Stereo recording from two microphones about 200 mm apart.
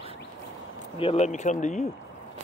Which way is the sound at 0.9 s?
30° left (ahead or behind).